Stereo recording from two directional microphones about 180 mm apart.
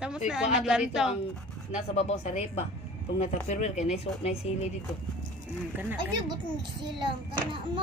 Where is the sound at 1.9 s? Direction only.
35° left (ahead or behind).